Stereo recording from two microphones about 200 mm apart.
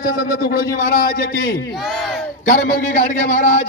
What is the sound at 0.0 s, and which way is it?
A man's voice, 50° left (ahead or behind).